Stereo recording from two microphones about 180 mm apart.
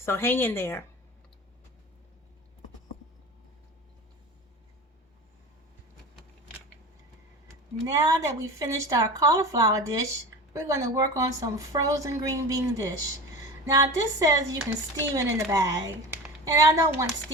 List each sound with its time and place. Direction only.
0.0 s a woman's voice: 15° left (ahead or behind)
7.9 s a woman's voice: 20° right (ahead or behind)